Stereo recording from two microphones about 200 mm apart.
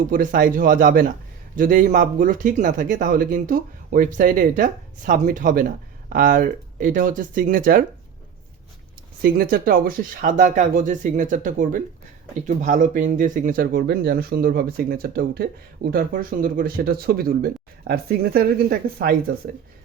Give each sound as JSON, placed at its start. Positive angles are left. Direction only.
{"t": 0.0, "sound": "speech", "side_deg": -40}
{"t": 9.2, "sound": "speech", "side_deg": -50}